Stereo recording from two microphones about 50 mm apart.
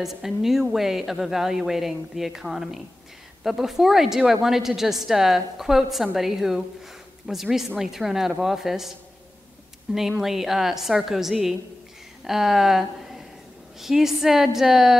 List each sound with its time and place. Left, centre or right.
0.0 s a woman's voice: centre
9.9 s a woman's voice: centre